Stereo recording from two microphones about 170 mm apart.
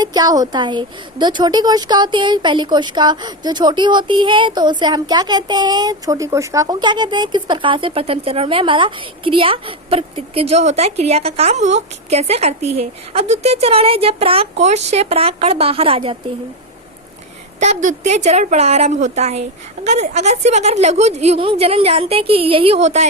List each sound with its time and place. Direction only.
0.0 s a woman's voice: 25° right (ahead or behind)
17.6 s a woman's voice: 45° right (ahead or behind)